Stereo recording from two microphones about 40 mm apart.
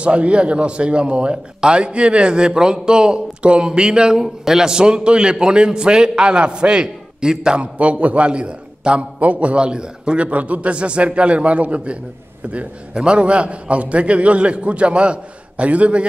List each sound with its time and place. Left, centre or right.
0.0 s a man's voice: right